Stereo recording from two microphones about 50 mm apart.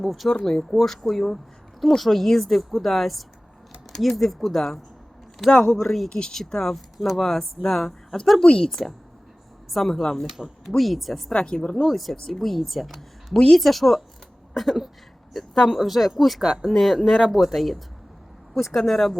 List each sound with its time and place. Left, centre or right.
0.0 s speech: centre
0.3 s speech: centre
0.7 s speech: centre
6.1 s speech: centre
11.3 s speech: left
11.8 s speech: centre